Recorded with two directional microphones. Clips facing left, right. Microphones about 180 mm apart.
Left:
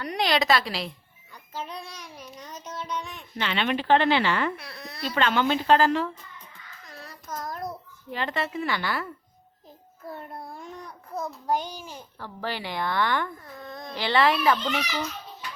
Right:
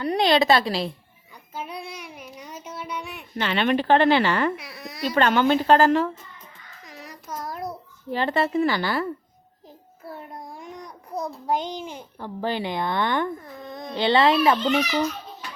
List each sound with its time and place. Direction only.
0.0 s a child's voice: 25° right (ahead or behind)
1.3 s child singing: 10° right (ahead or behind)
3.3 s a woman's voice: 45° right (ahead or behind)
4.5 s baby cry: 10° right (ahead or behind)
5.1 s a woman's voice: 45° right (ahead or behind)
6.8 s child singing: 15° right (ahead or behind)
8.1 s a woman's voice: 35° right (ahead or behind)
10.1 s a child's voice: 10° right (ahead or behind); by 14.8 s 25° right (ahead or behind)